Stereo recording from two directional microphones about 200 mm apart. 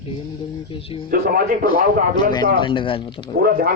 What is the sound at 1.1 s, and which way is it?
Speech, 50° right (ahead or behind).